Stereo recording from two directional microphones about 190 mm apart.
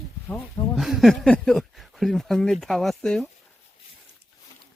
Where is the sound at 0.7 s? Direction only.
Centre (ahead or behind).